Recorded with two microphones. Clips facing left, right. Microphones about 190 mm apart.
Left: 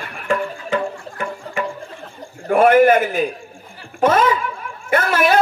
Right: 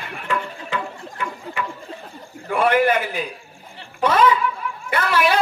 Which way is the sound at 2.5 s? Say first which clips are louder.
Left 6 dB; 45° left (ahead or behind).